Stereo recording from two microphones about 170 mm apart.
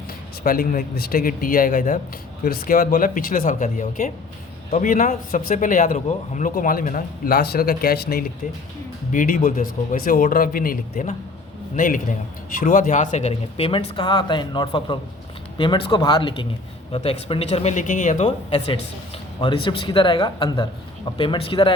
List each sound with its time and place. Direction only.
0.4 s a man's voice: 55° left (ahead or behind)
9.1 s a man's voice: 50° left (ahead or behind); by 21.7 s 30° left (ahead or behind)